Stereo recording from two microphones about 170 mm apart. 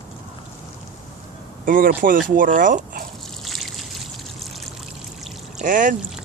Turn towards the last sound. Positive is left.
turn(degrees=-50)  # may be behind; listen again after turning